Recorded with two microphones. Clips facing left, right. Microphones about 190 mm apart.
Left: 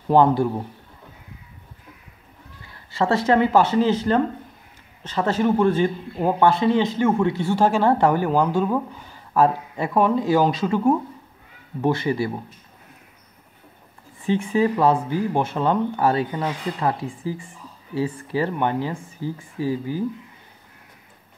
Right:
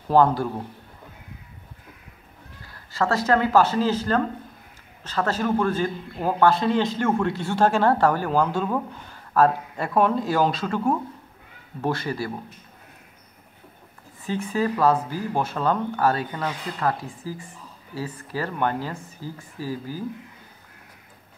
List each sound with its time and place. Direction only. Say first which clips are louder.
0.1 s speech: left 2 dB; 20° left (ahead or behind)
3.3 s speech: left 1 dB; 15° left (ahead or behind)
14.4 s speech: left 1 dB; 20° left (ahead or behind)